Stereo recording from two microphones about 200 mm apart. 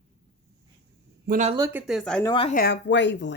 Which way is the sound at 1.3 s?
35° right (ahead or behind).